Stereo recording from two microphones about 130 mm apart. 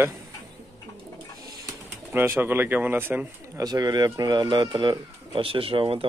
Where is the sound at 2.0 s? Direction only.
15° right (ahead or behind).